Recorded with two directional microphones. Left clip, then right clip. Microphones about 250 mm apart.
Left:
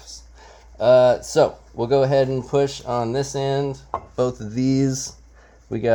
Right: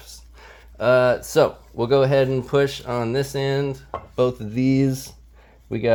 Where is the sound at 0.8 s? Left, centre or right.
Right.